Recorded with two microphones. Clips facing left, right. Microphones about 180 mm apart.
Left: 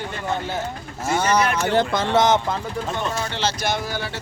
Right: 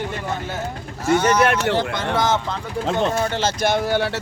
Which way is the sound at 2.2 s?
20° left (ahead or behind).